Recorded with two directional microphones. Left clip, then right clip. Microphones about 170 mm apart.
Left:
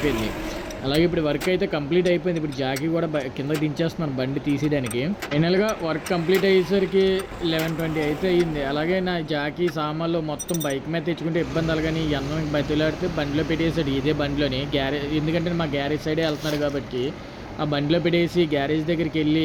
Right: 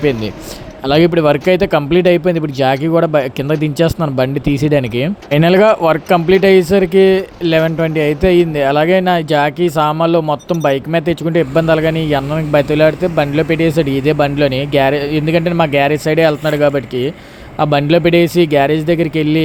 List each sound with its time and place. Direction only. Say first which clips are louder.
0.9 s speech: right 11 dB; 50° right (ahead or behind)